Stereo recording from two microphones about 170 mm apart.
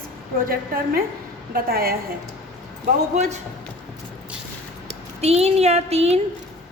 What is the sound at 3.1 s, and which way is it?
Speech, 40° right (ahead or behind).